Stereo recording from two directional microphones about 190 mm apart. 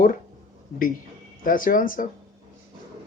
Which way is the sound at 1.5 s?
45° left (ahead or behind).